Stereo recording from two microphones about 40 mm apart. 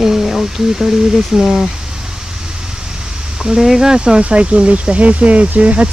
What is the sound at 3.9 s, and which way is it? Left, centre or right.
Speech, centre.